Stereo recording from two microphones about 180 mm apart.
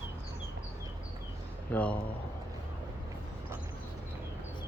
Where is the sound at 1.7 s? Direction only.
10° left (ahead or behind).